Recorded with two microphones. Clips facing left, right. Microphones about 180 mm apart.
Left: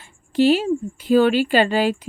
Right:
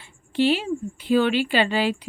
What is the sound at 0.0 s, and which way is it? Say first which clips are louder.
A woman's voice: left 4 dB; 40° left (ahead or behind).